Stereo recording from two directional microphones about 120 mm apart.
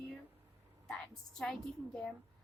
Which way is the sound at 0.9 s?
5° left (ahead or behind).